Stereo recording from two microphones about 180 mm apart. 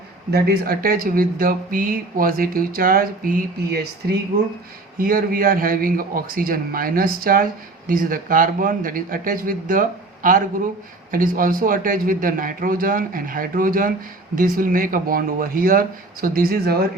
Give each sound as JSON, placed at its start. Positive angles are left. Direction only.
{"t": 0.3, "sound": "a man's voice", "side_deg": -60}